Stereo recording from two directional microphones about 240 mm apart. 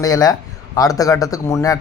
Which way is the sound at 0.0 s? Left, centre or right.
Centre.